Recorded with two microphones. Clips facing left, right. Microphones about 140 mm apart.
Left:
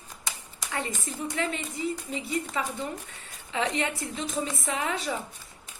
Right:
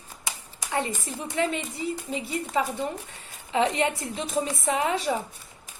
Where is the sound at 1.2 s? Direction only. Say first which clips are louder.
Right 4 dB; 30° right (ahead or behind).